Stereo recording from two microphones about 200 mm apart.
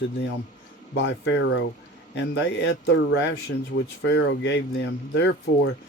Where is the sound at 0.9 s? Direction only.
65° left (ahead or behind).